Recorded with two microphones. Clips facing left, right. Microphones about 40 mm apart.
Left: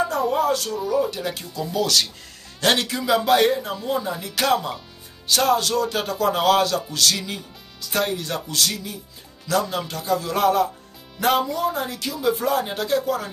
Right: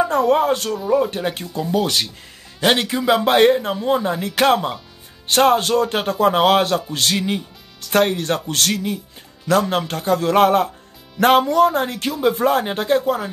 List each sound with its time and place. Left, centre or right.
0.4 s a man's voice: right